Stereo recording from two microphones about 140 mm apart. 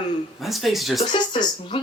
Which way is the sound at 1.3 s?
35° left (ahead or behind).